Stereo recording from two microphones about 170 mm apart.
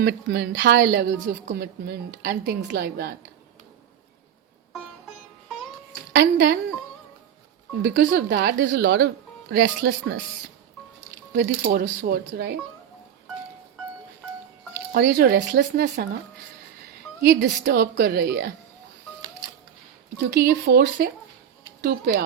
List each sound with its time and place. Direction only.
0.0 s a woman's voice: 80° right
6.1 s a woman's voice: 85° right
7.8 s speech: 80° right
11.3 s a woman's voice: 80° right
11.8 s speech: 65° right (ahead or behind)
14.9 s speech: 70° right (ahead or behind)
17.2 s a woman's voice: 80° right
20.3 s speech: 70° right (ahead or behind)